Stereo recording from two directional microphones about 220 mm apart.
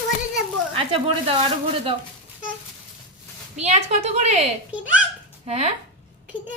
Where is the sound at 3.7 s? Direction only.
30° right (ahead or behind).